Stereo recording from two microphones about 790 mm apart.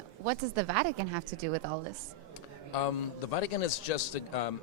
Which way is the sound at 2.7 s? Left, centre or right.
Left.